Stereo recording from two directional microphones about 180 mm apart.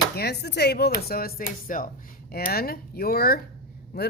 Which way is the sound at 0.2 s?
65° left (ahead or behind).